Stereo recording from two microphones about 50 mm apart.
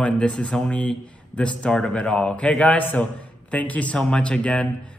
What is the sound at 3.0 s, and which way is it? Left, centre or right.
Speech, left.